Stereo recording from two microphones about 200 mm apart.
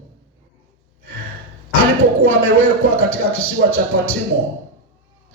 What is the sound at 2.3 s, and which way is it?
A man's voice, 90° right.